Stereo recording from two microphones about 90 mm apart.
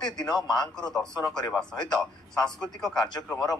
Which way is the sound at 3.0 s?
50° left (ahead or behind).